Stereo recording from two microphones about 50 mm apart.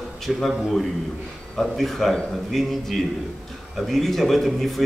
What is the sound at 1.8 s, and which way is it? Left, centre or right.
Speech, centre.